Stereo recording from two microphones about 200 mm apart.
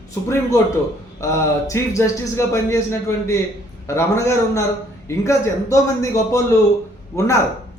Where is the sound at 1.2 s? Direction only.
15° left (ahead or behind).